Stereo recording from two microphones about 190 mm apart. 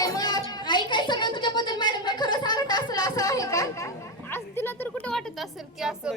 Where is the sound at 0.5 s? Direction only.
25° left (ahead or behind).